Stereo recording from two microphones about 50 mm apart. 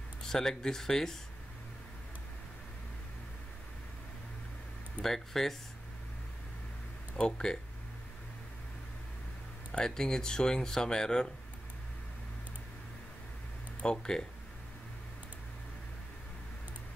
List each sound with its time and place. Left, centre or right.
0.3 s speech: centre
5.0 s speech: centre
7.2 s speech: centre
9.7 s speech: centre
13.8 s speech: centre